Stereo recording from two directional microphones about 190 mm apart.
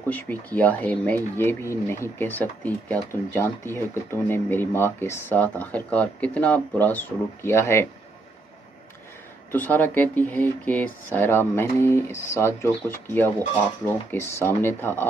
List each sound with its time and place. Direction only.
0.1 s speech: 10° left (ahead or behind)
9.5 s speech: 10° left (ahead or behind)